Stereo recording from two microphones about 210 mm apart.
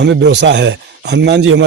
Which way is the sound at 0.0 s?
55° right (ahead or behind).